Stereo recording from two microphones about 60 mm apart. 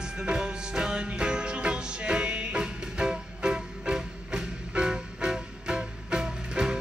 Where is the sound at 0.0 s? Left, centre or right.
Centre.